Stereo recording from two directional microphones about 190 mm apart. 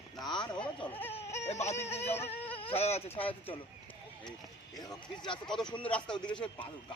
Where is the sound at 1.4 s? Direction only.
35° left (ahead or behind).